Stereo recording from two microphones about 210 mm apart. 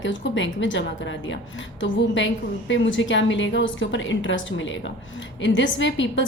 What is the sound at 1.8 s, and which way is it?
A woman's voice, 60° left (ahead or behind).